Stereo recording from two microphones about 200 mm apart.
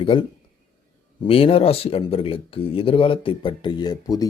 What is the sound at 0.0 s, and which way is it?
Speech, 25° left (ahead or behind).